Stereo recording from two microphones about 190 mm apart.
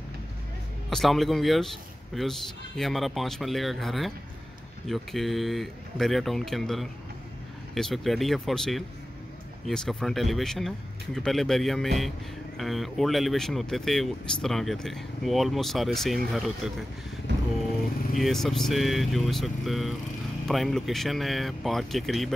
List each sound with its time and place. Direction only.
0.8 s speech: centre (ahead or behind)
17.3 s vehicle: 65° right (ahead or behind)
18.1 s speech: centre (ahead or behind)